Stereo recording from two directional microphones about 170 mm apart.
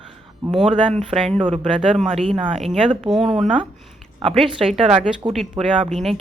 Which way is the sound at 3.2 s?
35° right (ahead or behind).